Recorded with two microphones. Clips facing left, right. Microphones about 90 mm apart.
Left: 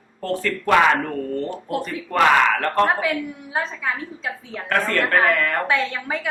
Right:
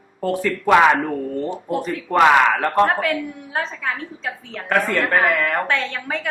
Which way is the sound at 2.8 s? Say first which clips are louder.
Right 1 dB; centre (ahead or behind).